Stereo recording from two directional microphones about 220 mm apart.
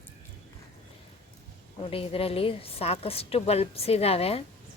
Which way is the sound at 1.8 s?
25° left (ahead or behind).